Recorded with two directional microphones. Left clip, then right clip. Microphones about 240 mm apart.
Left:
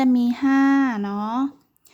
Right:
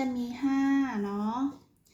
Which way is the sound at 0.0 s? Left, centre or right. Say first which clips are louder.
Left 12 dB; left.